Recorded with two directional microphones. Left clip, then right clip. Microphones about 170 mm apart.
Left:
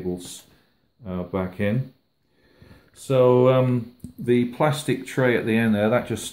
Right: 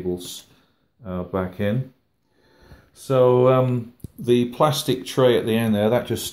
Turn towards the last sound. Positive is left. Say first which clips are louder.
# right 1 dB
turn(degrees=-5)  # may be behind; listen again after turning